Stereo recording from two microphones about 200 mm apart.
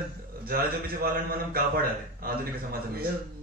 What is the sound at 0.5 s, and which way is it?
A man's voice, 50° right (ahead or behind).